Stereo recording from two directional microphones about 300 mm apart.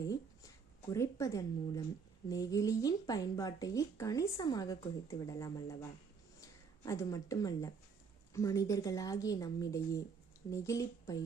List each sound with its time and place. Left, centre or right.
0.0 s speech: centre